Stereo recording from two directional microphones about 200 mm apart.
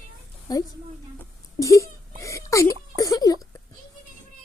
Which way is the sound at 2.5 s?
15° left (ahead or behind).